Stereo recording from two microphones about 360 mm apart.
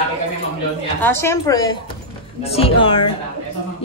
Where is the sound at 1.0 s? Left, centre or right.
Centre.